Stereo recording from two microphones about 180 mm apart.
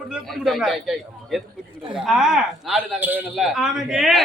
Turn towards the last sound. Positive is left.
turn(degrees=0)  # may be behind; listen again after turning